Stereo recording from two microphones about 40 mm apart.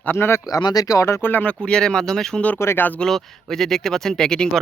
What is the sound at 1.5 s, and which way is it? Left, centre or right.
Speech, left.